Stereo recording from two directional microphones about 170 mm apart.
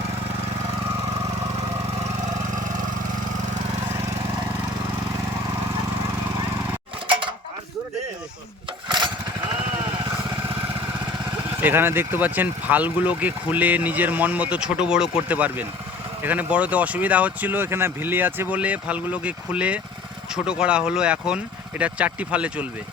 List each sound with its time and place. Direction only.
8.9 s lawn mower: 25° right (ahead or behind)
11.6 s speech: 15° right (ahead or behind)